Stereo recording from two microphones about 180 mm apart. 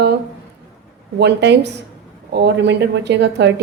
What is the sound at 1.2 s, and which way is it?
A woman's voice, 70° right (ahead or behind).